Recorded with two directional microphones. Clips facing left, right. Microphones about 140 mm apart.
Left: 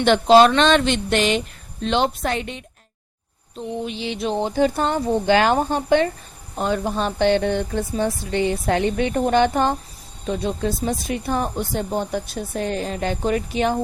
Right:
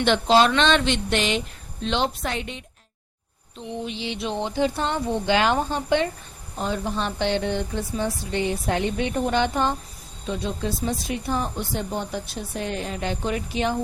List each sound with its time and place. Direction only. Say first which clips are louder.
0.0 s speech: left 5 dB; 50° left (ahead or behind)
3.8 s speech: left 3 dB; 50° left (ahead or behind)